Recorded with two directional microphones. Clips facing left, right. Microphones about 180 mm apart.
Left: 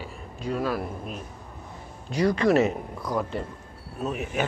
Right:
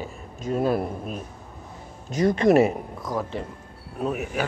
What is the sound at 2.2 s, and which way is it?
Speech, 20° right (ahead or behind).